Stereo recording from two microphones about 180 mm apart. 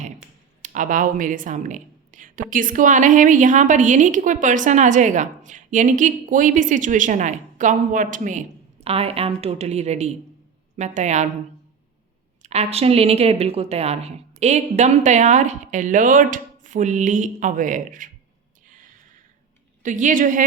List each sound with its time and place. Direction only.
0.6 s speech: 45° right (ahead or behind)
12.4 s speech: 35° right (ahead or behind)
19.8 s speech: 45° right (ahead or behind)